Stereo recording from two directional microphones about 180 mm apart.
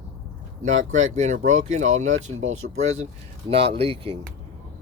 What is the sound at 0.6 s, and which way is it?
Speech, 45° right (ahead or behind).